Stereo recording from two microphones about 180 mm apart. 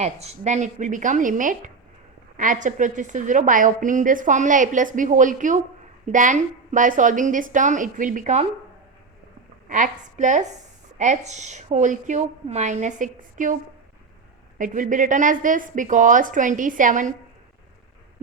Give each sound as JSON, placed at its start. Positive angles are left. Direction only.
{"t": 0.0, "sound": "a woman's voice", "side_deg": -40}
{"t": 9.6, "sound": "a woman's voice", "side_deg": -45}
{"t": 14.6, "sound": "a woman's voice", "side_deg": -45}